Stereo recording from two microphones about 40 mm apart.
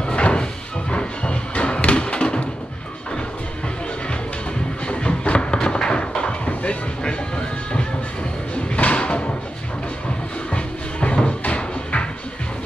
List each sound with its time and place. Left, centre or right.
0.0 s music: left
4.8 s a sound: left
8.6 s music: left
10.5 s music: left